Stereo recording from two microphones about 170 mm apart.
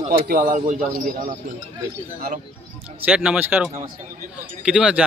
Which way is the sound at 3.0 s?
5° right (ahead or behind).